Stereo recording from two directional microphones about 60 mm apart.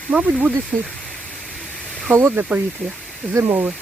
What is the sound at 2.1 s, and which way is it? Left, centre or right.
Speech, right.